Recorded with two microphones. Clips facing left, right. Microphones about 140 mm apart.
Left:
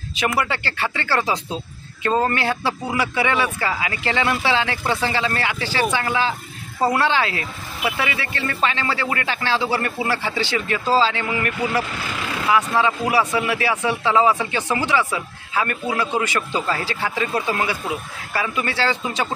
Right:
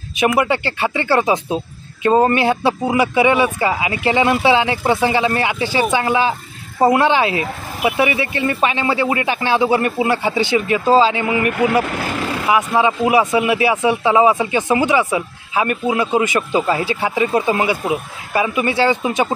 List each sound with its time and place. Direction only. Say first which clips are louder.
0.1 s speech: right 6 dB; 20° right (ahead or behind)
11.8 s speech: right 6 dB; 50° right (ahead or behind)
12.4 s speech: right 3 dB; 20° right (ahead or behind)